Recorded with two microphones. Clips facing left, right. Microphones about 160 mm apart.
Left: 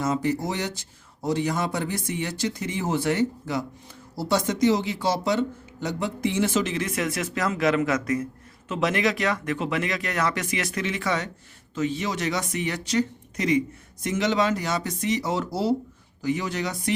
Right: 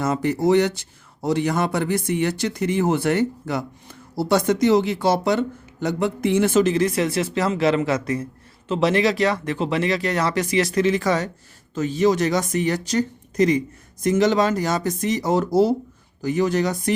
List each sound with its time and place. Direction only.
0.0 s speech: 60° right (ahead or behind); by 16.9 s 45° right (ahead or behind)